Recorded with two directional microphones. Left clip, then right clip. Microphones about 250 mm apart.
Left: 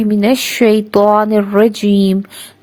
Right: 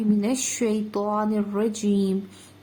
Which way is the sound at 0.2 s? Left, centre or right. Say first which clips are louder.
Left 14 dB; left.